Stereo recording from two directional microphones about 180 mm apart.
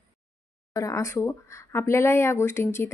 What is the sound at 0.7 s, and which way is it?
Speech, 20° left (ahead or behind).